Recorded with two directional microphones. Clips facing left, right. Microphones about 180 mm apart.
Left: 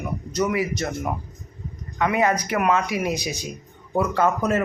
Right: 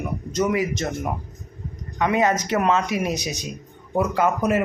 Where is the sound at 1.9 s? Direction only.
20° right (ahead or behind).